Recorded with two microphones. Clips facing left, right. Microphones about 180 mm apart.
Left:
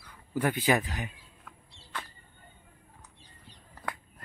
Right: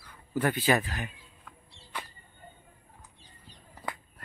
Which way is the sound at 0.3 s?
10° left (ahead or behind).